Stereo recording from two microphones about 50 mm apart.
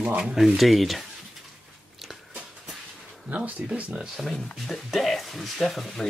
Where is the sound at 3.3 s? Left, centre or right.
Right.